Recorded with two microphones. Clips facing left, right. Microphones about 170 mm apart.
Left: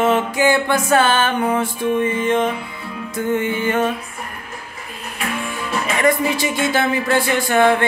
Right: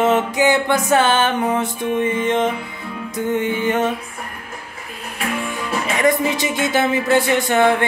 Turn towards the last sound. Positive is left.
turn(degrees=-20)  # may be behind; listen again after turning